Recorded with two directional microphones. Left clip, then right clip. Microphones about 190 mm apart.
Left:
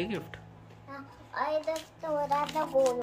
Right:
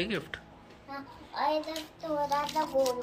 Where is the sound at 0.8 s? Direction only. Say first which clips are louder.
Right 3 dB; 5° left (ahead or behind).